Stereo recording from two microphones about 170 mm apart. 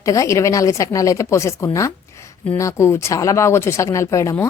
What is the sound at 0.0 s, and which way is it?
Speech, 20° left (ahead or behind).